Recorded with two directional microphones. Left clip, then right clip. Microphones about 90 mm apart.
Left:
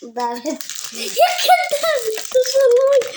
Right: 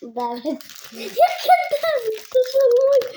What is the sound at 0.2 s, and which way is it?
Speech, 15° right (ahead or behind).